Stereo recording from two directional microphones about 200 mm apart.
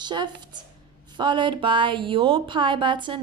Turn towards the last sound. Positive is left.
turn(degrees=-25)  # may be behind; listen again after turning